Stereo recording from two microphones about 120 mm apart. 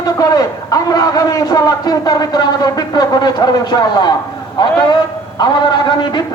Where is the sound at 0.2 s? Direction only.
30° left (ahead or behind).